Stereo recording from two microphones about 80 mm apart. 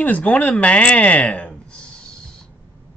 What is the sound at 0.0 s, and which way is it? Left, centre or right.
Speech, centre.